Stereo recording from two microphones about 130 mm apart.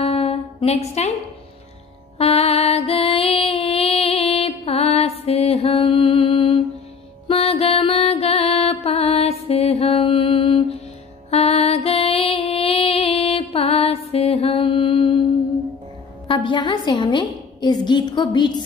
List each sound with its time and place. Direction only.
0.0 s music: 50° left (ahead or behind)
2.1 s music: 50° left (ahead or behind)
16.3 s a woman's voice: 40° left (ahead or behind)